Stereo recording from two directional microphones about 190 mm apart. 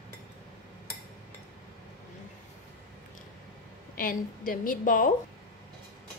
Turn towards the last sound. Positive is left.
turn(degrees=45)  # may be behind; listen again after turning